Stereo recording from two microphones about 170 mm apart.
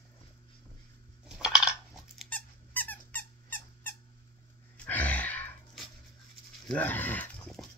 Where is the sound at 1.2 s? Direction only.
5° right (ahead or behind).